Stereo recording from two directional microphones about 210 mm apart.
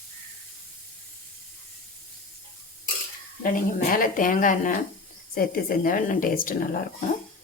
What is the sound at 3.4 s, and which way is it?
A woman's voice, 40° left (ahead or behind).